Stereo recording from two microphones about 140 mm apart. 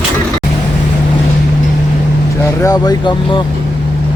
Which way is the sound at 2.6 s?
25° left (ahead or behind).